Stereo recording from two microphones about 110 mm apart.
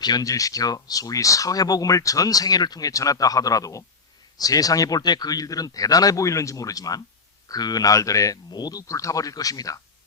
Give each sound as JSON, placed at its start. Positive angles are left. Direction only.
{"t": 0.0, "sound": "speech", "side_deg": 35}